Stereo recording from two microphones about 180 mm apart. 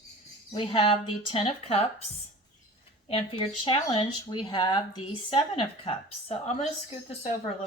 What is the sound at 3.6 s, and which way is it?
Speech, 30° left (ahead or behind).